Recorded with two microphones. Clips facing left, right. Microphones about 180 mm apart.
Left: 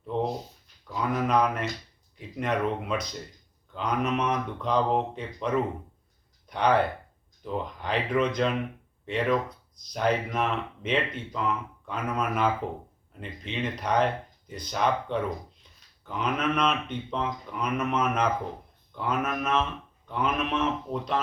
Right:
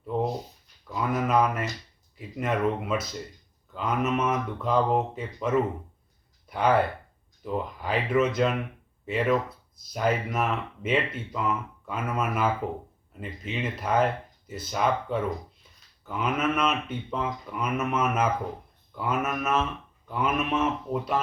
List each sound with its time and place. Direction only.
0.0 s a sound: 5° right (ahead or behind)
2.1 s speech: 5° right (ahead or behind)
20.1 s mantra: 5° right (ahead or behind)